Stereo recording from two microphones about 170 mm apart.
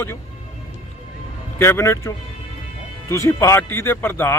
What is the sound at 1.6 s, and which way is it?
Speech, 15° left (ahead or behind).